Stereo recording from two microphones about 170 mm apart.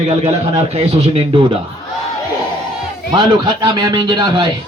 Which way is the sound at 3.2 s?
25° right (ahead or behind).